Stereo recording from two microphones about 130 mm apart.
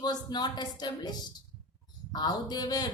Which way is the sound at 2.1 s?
30° left (ahead or behind).